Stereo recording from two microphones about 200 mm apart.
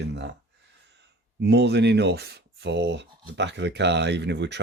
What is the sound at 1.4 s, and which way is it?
Speech, 55° right (ahead or behind).